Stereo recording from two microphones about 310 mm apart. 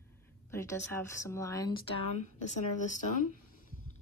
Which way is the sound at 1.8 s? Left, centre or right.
Left.